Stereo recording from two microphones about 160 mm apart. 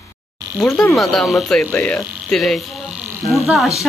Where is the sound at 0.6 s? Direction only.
Centre (ahead or behind).